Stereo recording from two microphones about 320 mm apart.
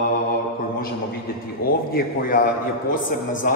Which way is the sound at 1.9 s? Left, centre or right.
Left.